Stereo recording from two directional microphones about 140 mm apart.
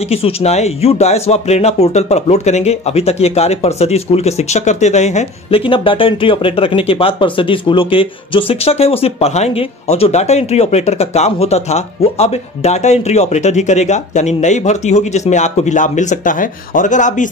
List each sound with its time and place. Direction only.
0.0 s speech: 45° left (ahead or behind); by 17.3 s 65° left (ahead or behind)